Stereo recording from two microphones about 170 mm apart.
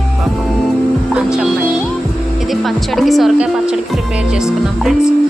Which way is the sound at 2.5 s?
Centre (ahead or behind).